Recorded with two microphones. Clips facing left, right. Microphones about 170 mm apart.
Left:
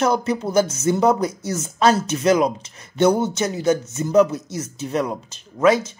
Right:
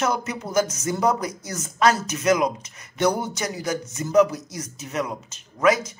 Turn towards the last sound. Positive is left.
turn(degrees=30)  # may be behind; listen again after turning